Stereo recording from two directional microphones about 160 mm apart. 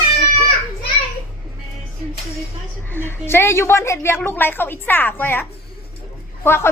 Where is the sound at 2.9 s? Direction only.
15° left (ahead or behind).